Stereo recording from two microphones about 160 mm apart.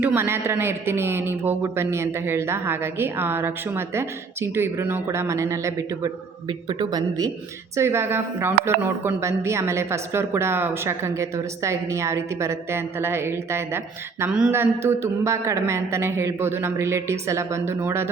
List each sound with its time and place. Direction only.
0.0 s a woman's voice: 15° right (ahead or behind)
6.5 s speech: 30° right (ahead or behind)
7.8 s a woman's voice: 15° right (ahead or behind)